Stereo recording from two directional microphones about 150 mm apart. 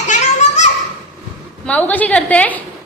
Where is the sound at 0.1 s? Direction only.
50° left (ahead or behind).